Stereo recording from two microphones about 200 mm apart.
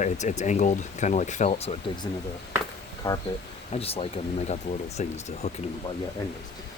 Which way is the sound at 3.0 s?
25° left (ahead or behind).